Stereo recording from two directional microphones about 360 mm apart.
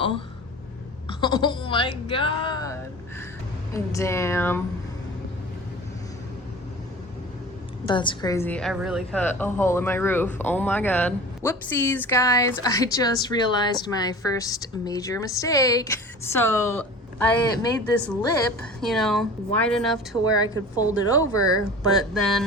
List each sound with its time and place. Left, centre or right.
1.2 s a woman's voice: centre
3.8 s a woman's voice: centre
7.9 s a woman's voice: centre
18.8 s speech: centre